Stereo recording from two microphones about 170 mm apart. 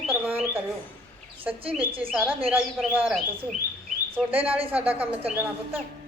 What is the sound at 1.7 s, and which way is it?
Speech, 10° right (ahead or behind).